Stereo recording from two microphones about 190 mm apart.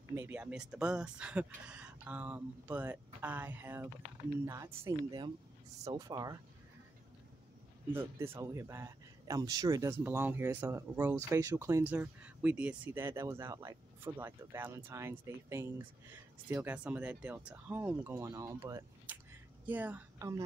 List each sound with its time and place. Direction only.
0.1 s speech: 10° right (ahead or behind)
7.9 s a woman's voice: 10° right (ahead or behind)